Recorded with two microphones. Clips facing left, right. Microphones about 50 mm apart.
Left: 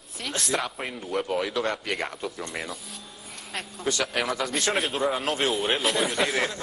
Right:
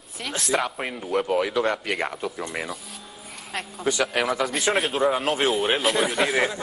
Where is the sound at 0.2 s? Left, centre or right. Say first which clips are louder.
Right 3 dB; centre.